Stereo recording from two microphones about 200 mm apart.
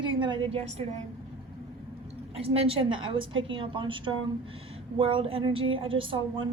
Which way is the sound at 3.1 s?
80° right.